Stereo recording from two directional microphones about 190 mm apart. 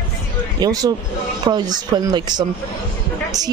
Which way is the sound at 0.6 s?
20° right (ahead or behind).